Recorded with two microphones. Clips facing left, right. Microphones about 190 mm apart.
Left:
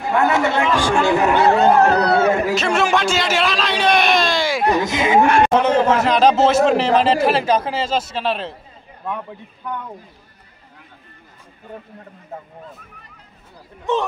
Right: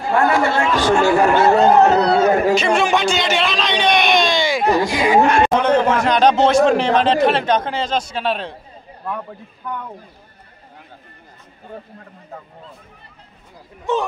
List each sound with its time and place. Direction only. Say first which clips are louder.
0.0 s speech: right 1 dB; 20° left (ahead or behind)
1.8 s speech: right 2 dB; 20° right (ahead or behind)
2.5 s speech: right 2 dB; centre (ahead or behind)
4.7 s speech: right 2 dB; 20° left (ahead or behind)
5.2 s a man's voice: even; 5° left (ahead or behind)